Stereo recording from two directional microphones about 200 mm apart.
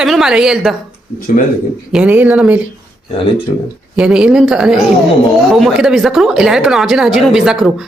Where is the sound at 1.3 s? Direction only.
40° left (ahead or behind).